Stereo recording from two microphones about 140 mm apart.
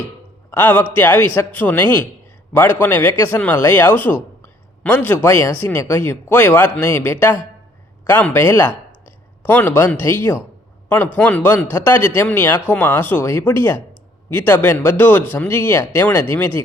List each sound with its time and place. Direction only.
0.5 s a man's voice: 15° left (ahead or behind)